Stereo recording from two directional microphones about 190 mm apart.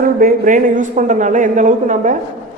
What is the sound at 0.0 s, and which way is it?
A man's voice, 50° right (ahead or behind).